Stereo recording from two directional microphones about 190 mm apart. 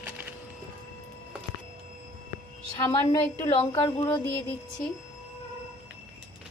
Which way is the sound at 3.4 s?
25° left (ahead or behind).